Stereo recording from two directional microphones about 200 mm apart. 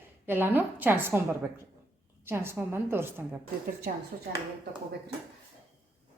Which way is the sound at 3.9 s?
45° right (ahead or behind).